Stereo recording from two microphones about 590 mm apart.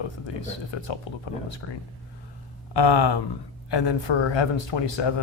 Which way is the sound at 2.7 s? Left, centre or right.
Left.